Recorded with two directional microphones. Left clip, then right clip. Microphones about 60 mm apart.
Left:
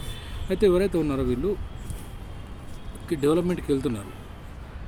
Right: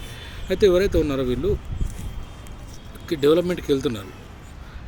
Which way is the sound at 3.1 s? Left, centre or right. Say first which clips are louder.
Right 5 dB; centre.